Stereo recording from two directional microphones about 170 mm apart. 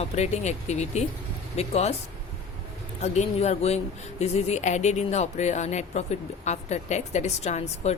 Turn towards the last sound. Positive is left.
turn(degrees=40)  # may be behind; listen again after turning